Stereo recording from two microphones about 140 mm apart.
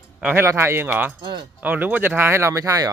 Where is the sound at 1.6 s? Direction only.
10° right (ahead or behind).